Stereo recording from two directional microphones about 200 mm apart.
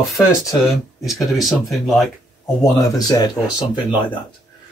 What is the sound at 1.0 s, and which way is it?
Speech, centre (ahead or behind).